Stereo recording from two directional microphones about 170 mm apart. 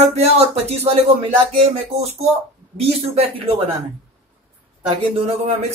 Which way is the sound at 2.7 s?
35° right (ahead or behind).